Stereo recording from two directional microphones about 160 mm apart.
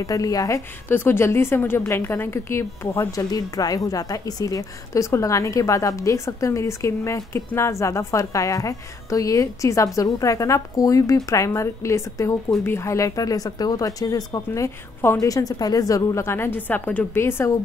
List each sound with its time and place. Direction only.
0.0 s a woman's voice: 20° left (ahead or behind)